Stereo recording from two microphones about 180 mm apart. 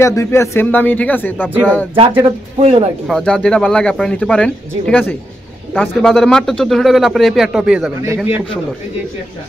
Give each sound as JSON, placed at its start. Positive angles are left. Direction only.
{"t": 0.0, "sound": "speech", "side_deg": 15}
{"t": 2.2, "sound": "speech", "side_deg": -35}
{"t": 3.1, "sound": "speech", "side_deg": 0}